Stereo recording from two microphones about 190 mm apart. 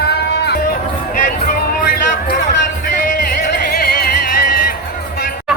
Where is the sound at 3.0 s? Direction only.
50° left (ahead or behind).